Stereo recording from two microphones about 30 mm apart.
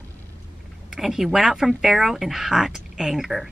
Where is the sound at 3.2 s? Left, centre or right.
Centre.